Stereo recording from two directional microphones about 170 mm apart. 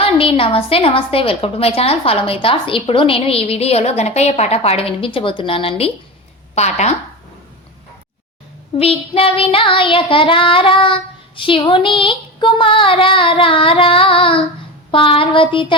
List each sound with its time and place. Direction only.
0.0 s a woman's voice: 30° left (ahead or behind)
8.8 s a woman's voice: 35° left (ahead or behind)